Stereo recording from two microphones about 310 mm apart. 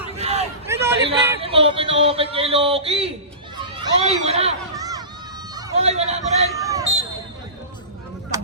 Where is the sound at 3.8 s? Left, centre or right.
Centre.